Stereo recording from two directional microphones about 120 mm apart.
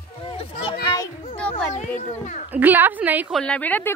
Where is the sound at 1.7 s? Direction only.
75° left (ahead or behind).